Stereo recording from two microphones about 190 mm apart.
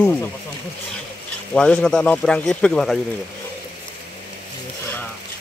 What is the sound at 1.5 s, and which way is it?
Speech, 5° left (ahead or behind).